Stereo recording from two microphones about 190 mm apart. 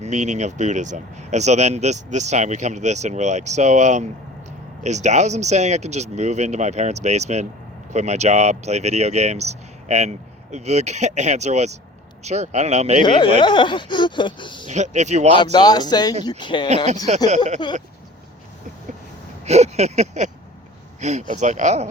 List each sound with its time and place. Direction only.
0.0 s speech: 40° right (ahead or behind)
13.1 s speech: 25° left (ahead or behind)
14.7 s speech: 40° right (ahead or behind)
15.5 s speech: 20° left (ahead or behind)
16.6 s speech: 35° right (ahead or behind)
19.5 s a sound: 35° right (ahead or behind)
21.0 s speech: 40° right (ahead or behind)